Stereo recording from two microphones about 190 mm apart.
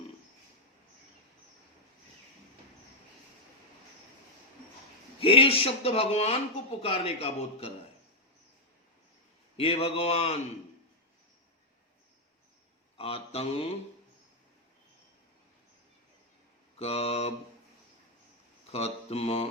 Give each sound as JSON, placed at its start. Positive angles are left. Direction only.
{"t": 5.2, "sound": "speech", "side_deg": 30}
{"t": 9.6, "sound": "speech", "side_deg": 30}
{"t": 13.0, "sound": "speech", "side_deg": 30}
{"t": 16.7, "sound": "mantra", "side_deg": 30}
{"t": 18.7, "sound": "speech", "side_deg": 35}